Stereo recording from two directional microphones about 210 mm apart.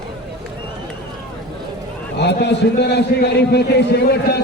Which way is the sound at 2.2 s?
55° left (ahead or behind).